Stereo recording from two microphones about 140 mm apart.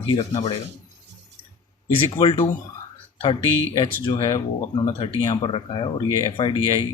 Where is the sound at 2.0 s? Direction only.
40° left (ahead or behind).